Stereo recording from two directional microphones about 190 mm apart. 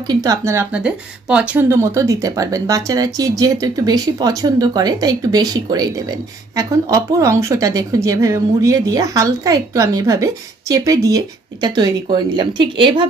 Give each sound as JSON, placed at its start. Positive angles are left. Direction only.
{"t": 0.0, "sound": "speech", "side_deg": -20}